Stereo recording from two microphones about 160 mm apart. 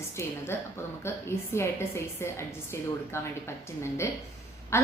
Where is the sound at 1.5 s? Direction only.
15° left (ahead or behind).